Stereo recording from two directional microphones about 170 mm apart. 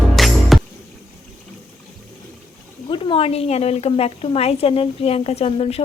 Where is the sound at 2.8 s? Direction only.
30° left (ahead or behind).